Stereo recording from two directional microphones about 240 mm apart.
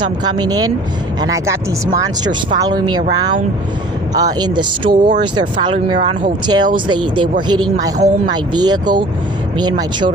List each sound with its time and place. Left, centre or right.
0.0 s speech: centre
2.6 s speech: centre
4.1 s speech: centre